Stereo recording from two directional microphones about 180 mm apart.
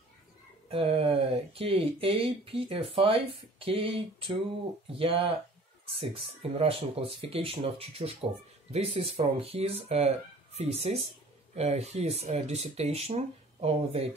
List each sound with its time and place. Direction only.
0.7 s speech: 30° right (ahead or behind)
6.6 s speech: 30° right (ahead or behind)